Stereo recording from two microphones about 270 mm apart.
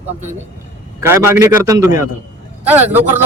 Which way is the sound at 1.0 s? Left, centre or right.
Centre.